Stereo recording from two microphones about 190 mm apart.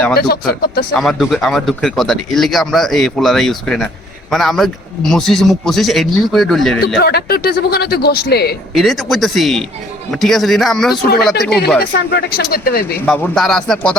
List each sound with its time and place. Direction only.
0.9 s speech: centre (ahead or behind)
6.8 s a man's voice: 55° left (ahead or behind)
8.7 s speech: centre (ahead or behind)
11.8 s speech: 55° left (ahead or behind)
13.1 s speech: 5° left (ahead or behind)